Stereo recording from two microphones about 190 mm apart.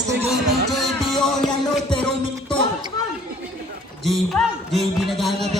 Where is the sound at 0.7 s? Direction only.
Centre (ahead or behind).